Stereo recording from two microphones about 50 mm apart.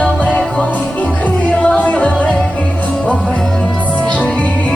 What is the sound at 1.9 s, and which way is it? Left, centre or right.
Music, left.